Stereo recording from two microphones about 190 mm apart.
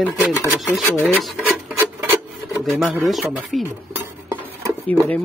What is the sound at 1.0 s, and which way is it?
Filing, centre (ahead or behind).